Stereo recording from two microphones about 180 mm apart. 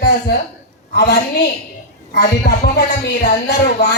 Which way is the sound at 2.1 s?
65° left (ahead or behind).